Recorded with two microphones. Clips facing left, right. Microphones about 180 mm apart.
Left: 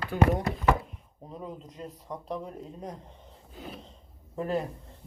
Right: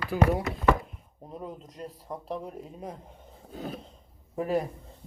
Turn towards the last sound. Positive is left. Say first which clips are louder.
# right 2 dB
turn(degrees=-10)  # may be behind; listen again after turning